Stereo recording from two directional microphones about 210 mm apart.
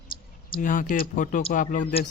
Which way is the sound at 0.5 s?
40° left (ahead or behind).